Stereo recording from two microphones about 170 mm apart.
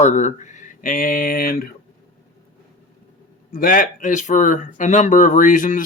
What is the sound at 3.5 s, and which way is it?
Speech, 55° left (ahead or behind).